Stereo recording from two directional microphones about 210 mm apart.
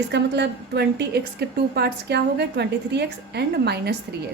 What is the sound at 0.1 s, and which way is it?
A woman's voice, 55° right (ahead or behind).